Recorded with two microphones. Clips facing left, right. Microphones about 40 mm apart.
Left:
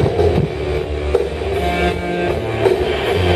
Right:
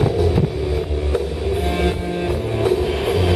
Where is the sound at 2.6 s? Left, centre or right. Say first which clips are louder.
Left 4 dB; left.